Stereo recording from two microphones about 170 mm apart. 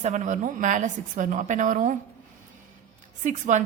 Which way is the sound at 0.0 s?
50° right (ahead or behind).